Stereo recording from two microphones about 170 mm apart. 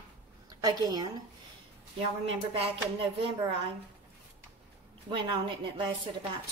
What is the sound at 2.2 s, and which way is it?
Speech, 35° right (ahead or behind).